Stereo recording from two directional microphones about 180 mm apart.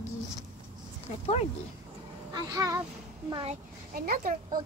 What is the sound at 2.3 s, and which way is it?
Speech, 20° right (ahead or behind).